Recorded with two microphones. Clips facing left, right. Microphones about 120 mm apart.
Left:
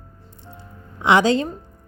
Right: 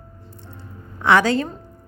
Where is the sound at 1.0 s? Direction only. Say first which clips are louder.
Left 1 dB; 20° left (ahead or behind).